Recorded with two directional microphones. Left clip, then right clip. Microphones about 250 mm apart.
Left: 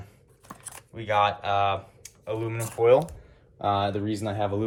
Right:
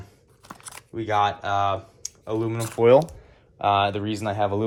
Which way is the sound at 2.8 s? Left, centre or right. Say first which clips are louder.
Right 3 dB; right.